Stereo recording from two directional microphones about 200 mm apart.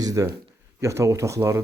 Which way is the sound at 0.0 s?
15° right (ahead or behind).